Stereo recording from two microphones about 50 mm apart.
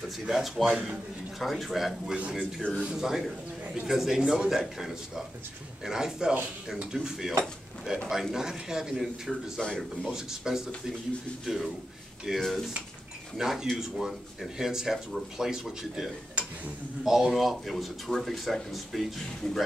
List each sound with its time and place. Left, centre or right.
0.3 s speech: centre
0.7 s speech: centre
1.4 s speech: centre
2.3 s a man's voice: centre
2.8 s speech: centre
8.9 s speech: centre
10.0 s speech: centre
12.4 s a man's voice: centre
13.4 s speech: centre